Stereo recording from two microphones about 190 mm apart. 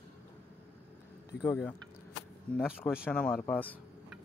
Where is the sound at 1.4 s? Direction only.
10° left (ahead or behind).